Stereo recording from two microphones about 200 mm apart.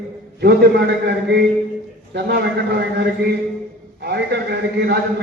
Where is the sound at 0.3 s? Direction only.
55° right (ahead or behind).